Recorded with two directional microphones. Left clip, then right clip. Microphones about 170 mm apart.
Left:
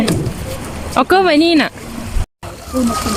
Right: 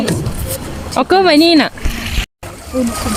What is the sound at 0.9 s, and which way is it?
Speech, 10° right (ahead or behind).